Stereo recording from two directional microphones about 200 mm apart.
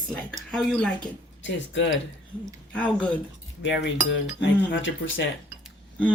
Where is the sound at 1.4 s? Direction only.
65° left (ahead or behind).